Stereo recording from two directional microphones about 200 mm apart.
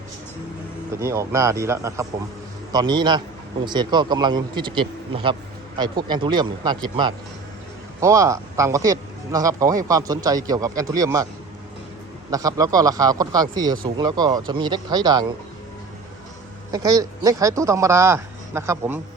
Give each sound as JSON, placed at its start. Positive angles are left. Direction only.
{"t": 0.9, "sound": "a man's voice", "side_deg": -15}
{"t": 12.3, "sound": "a man's voice", "side_deg": -15}
{"t": 16.7, "sound": "speech", "side_deg": -20}